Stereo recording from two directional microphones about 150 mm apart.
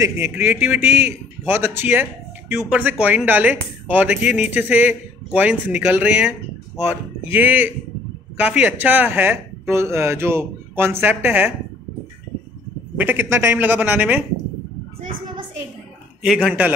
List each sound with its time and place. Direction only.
0.0 s speech: 15° right (ahead or behind)
6.8 s speech: 45° left (ahead or behind)
7.3 s speech: 10° right (ahead or behind)
13.0 s speech: 15° right (ahead or behind)
16.4 s speech: 10° right (ahead or behind)